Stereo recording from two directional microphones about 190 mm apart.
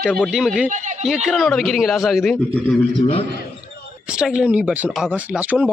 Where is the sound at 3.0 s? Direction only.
30° left (ahead or behind).